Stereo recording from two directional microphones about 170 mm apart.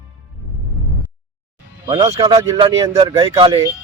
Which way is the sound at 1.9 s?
30° right (ahead or behind).